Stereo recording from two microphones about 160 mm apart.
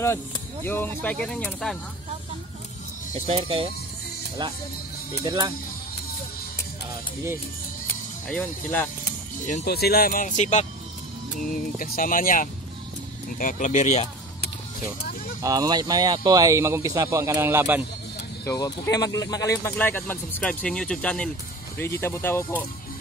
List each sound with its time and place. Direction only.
0.7 s speech: 10° left (ahead or behind)
3.3 s speech: 35° right (ahead or behind)
5.2 s speech: 25° right (ahead or behind)
9.0 s speech: 75° left (ahead or behind); by 10.7 s 45° left (ahead or behind)
11.4 s speech: 60° left (ahead or behind)
15.4 s speech: 25° right (ahead or behind)
18.4 s speech: 20° left (ahead or behind)
19.7 s speech: 10° left (ahead or behind)